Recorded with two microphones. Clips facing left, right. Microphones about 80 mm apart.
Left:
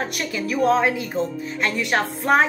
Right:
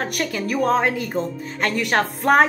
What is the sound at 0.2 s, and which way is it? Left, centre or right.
A woman's voice, right.